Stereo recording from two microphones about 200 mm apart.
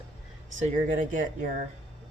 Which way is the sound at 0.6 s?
40° right (ahead or behind).